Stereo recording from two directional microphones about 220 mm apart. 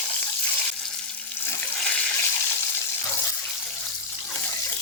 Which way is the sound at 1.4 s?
10° left (ahead or behind).